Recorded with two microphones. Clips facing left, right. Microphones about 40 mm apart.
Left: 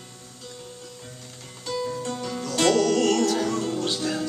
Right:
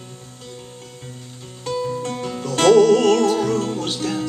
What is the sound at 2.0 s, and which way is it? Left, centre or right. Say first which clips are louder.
Music: right 4 dB; right.